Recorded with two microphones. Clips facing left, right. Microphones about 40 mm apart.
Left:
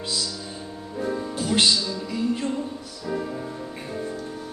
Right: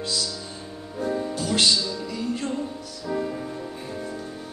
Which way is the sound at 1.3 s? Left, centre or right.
Left.